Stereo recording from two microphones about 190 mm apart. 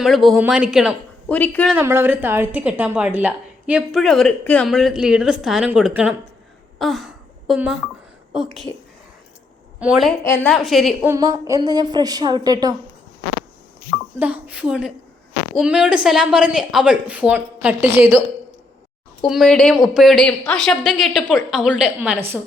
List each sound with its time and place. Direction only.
0.0 s a woman's voice: centre (ahead or behind)
1.7 s a woman's voice: 10° right (ahead or behind)
6.7 s a sound: centre (ahead or behind)
8.3 s a woman's voice: centre (ahead or behind)
9.8 s a woman's voice: centre (ahead or behind)
10.2 s a woman's voice: 15° left (ahead or behind)
10.5 s a woman's voice: centre (ahead or behind)
11.1 s a woman's voice: 15° right (ahead or behind)
13.9 s a woman's voice: 10° right (ahead or behind)
19.2 s a woman's voice: centre (ahead or behind)